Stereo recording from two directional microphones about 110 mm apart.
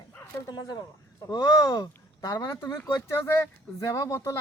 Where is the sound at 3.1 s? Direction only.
20° left (ahead or behind).